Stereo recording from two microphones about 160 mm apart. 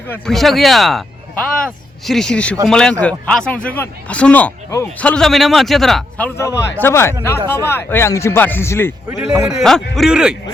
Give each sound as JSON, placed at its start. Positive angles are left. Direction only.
{"t": 0.1, "sound": "speech", "side_deg": 0}
{"t": 9.6, "sound": "speech", "side_deg": 0}